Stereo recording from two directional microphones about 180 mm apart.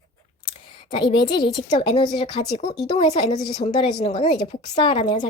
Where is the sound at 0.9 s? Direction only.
25° left (ahead or behind).